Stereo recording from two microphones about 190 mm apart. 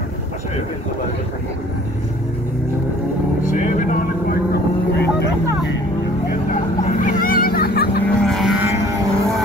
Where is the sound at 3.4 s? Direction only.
45° left (ahead or behind).